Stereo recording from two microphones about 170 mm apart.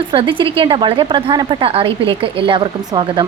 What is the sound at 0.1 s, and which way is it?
A woman's voice, 30° right (ahead or behind).